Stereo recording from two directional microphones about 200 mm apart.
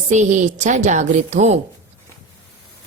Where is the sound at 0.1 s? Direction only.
35° right (ahead or behind).